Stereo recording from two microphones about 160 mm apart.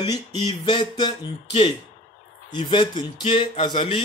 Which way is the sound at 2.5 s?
30° left (ahead or behind).